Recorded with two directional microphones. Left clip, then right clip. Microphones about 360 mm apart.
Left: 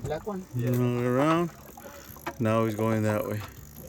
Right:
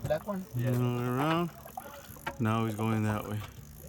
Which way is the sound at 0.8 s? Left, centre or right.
Centre.